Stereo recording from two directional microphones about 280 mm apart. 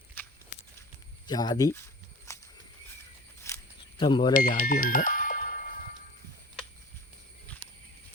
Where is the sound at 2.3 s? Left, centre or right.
Centre.